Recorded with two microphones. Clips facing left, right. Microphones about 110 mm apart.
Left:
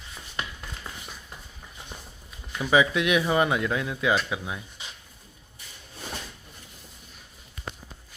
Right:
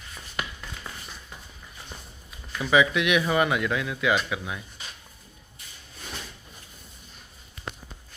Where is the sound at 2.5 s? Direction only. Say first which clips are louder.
Even; 15° left (ahead or behind).